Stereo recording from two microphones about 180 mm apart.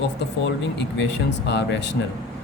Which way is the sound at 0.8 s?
75° left (ahead or behind).